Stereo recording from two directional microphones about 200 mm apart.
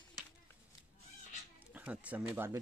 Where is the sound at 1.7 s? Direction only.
5° right (ahead or behind).